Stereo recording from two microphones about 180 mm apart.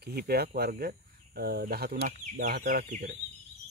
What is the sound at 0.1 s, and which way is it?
Speech, 60° right (ahead or behind).